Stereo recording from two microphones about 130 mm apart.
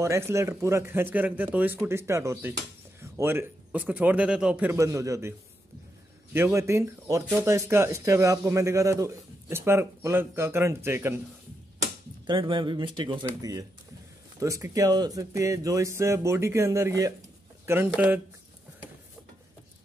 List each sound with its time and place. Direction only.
0.0 s speech: 20° right (ahead or behind)
4.7 s speech: 25° right (ahead or behind)
6.3 s speech: 20° right (ahead or behind)
12.3 s speech: 40° right (ahead or behind)
13.2 s speech: 25° right (ahead or behind)